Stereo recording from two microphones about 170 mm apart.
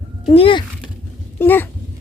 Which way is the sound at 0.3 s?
30° left (ahead or behind).